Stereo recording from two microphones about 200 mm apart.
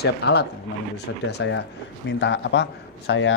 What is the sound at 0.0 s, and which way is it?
A man's voice, 55° left (ahead or behind).